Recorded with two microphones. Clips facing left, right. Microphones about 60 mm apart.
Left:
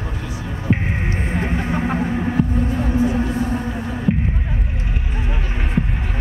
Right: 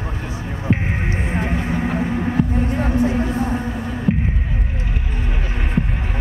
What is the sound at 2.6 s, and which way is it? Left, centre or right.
Music, right.